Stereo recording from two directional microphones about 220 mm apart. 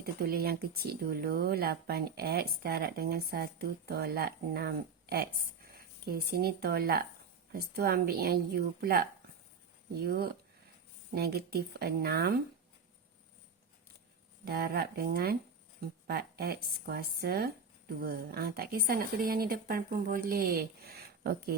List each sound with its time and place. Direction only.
0.0 s speech: 45° right (ahead or behind)
14.4 s speech: 45° right (ahead or behind)